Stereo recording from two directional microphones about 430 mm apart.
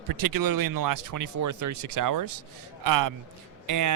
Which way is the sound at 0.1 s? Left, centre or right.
Right.